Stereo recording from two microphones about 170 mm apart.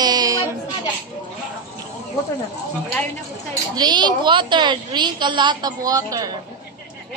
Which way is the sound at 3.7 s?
25° right (ahead or behind).